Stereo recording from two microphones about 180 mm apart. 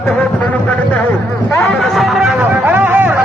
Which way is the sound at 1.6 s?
Centre (ahead or behind).